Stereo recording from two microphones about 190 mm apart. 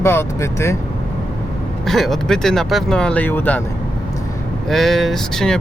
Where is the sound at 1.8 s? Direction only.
Centre (ahead or behind).